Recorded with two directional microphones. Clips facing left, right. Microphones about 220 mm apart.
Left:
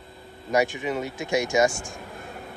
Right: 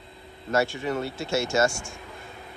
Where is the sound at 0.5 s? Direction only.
15° left (ahead or behind).